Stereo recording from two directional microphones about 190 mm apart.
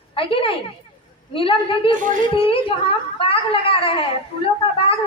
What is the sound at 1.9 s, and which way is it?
Speech, 45° right (ahead or behind).